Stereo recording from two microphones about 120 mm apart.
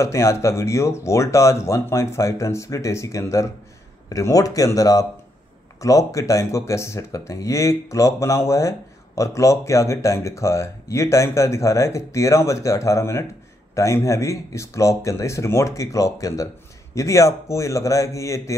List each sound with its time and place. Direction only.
0.0 s speech: 25° left (ahead or behind)